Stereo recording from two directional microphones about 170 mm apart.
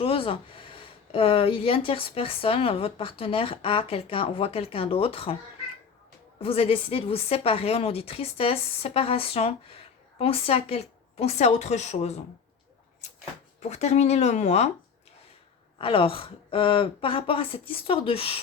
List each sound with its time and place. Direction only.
0.0 s speech: 35° left (ahead or behind)
6.4 s speech: 35° left (ahead or behind)
13.6 s speech: 40° left (ahead or behind)
15.8 s speech: 30° left (ahead or behind)